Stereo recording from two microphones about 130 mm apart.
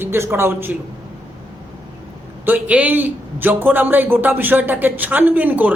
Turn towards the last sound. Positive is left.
turn(degrees=-15)  # may be behind; listen again after turning